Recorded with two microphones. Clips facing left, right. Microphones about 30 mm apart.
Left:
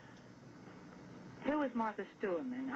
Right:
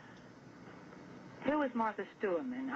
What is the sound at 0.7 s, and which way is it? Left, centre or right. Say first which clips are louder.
A man's voice: right 3 dB; centre.